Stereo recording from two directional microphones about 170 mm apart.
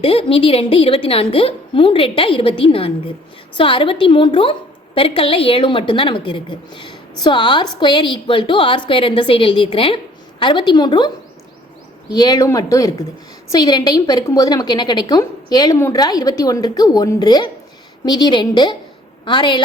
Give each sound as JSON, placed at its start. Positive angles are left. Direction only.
{"t": 0.0, "sound": "a woman's voice", "side_deg": 35}
{"t": 12.1, "sound": "a woman's voice", "side_deg": 25}